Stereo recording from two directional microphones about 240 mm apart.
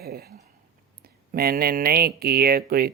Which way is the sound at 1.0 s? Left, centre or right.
Right.